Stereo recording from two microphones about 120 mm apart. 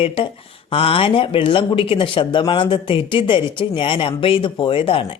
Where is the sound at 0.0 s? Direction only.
50° left (ahead or behind).